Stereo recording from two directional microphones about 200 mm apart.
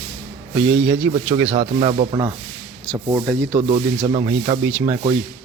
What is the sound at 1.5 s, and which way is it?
Speech, 35° right (ahead or behind).